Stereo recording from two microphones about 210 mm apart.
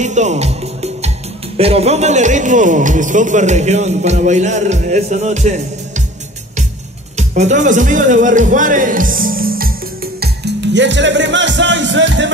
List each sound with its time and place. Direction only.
0.0 s music: 35° right (ahead or behind)
1.6 s speech: 30° right (ahead or behind)
7.2 s speech: 35° right (ahead or behind)
10.2 s music: 55° right (ahead or behind)